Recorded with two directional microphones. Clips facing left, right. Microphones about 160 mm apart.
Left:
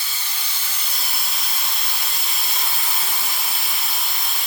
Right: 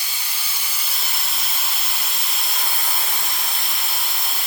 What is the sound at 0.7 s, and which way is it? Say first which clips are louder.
Steam: even; 5° right (ahead or behind).